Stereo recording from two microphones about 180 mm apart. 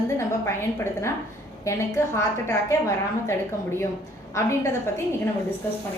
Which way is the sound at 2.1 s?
15° left (ahead or behind).